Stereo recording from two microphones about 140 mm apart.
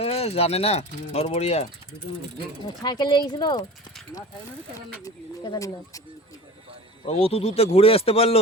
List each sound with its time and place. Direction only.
0.0 s speech: 45° left (ahead or behind)
2.6 s speech: 30° left (ahead or behind)
5.0 s speech: 30° left (ahead or behind)
7.0 s speech: 45° left (ahead or behind)